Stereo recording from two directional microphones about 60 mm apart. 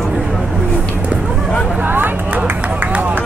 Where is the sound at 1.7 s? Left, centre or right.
Right.